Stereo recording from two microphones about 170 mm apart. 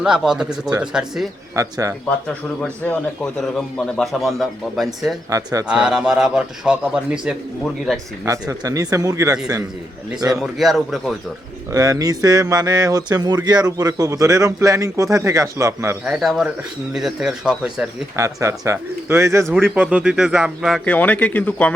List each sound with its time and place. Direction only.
0.0 s a man's voice: 5° right (ahead or behind)
1.5 s speech: 20° right (ahead or behind)
2.6 s a man's voice: 10° left (ahead or behind)
5.3 s speech: 20° right (ahead or behind)
5.6 s a man's voice: 5° right (ahead or behind)
8.2 s speech: 20° right (ahead or behind)
10.3 s a man's voice: centre (ahead or behind)
11.7 s speech: 20° right (ahead or behind)
16.0 s a man's voice: 5° right (ahead or behind)
18.2 s speech: 20° right (ahead or behind)
19.5 s a man's voice: 5° left (ahead or behind)
19.7 s a man's voice: 10° right (ahead or behind); by 21.7 s 10° left (ahead or behind)